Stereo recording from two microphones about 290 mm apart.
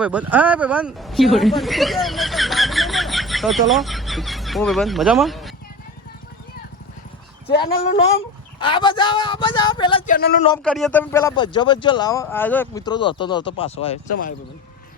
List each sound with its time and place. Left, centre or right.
0.0 s speech: centre
7.9 s a man's voice: left
8.6 s speech: centre
10.1 s a man's voice: left
10.6 s speech: centre; by 14.3 s left